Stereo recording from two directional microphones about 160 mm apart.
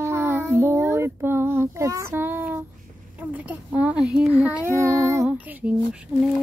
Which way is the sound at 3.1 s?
10° right (ahead or behind).